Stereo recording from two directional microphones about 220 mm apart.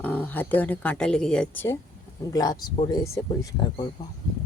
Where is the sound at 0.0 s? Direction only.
10° left (ahead or behind).